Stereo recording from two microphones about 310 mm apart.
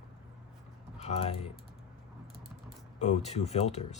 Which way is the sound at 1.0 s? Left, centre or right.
Centre.